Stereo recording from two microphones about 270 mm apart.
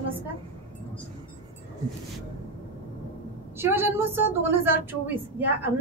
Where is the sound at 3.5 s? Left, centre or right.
Centre.